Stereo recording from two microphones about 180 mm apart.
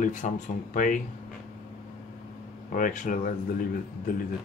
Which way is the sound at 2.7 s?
50° left (ahead or behind).